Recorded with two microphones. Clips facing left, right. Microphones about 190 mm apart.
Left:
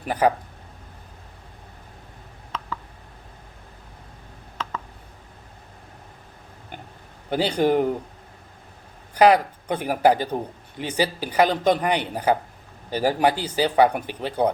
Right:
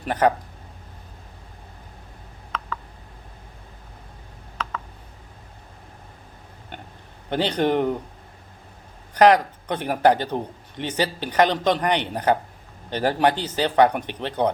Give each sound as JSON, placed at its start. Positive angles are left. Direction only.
{"t": 0.1, "sound": "a man's voice", "side_deg": 10}
{"t": 7.3, "sound": "a man's voice", "side_deg": 10}
{"t": 9.1, "sound": "a man's voice", "side_deg": 10}